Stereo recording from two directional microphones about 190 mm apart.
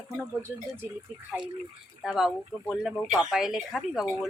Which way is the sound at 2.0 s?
Centre (ahead or behind).